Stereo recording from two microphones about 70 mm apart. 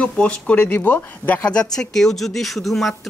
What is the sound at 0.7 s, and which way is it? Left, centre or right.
Speech, left.